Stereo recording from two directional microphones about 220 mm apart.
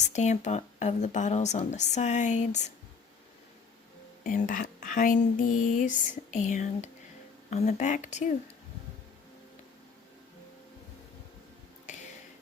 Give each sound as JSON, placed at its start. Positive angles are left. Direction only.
{"t": 0.0, "sound": "speech", "side_deg": 30}
{"t": 4.2, "sound": "speech", "side_deg": 35}
{"t": 11.9, "sound": "a sound", "side_deg": 35}